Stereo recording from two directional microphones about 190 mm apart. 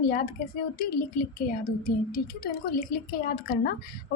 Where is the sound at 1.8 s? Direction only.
50° left (ahead or behind).